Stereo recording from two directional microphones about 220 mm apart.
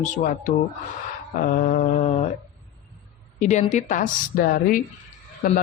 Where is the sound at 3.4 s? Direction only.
30° left (ahead or behind).